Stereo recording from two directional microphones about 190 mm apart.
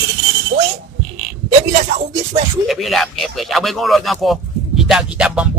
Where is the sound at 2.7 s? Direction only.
Centre (ahead or behind).